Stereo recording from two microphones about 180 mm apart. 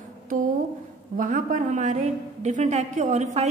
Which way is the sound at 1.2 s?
50° right (ahead or behind).